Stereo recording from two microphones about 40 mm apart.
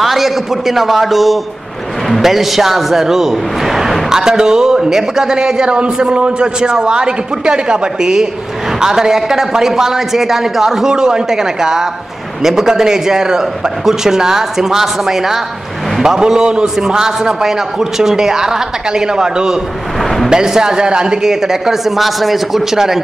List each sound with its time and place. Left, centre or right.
0.0 s a man's voice: centre